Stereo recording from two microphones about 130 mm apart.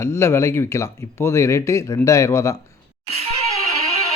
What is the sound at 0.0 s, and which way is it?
Speech, 20° left (ahead or behind).